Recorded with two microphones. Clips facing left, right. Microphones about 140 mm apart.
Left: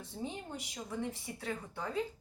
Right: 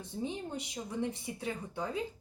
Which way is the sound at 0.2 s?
20° right (ahead or behind).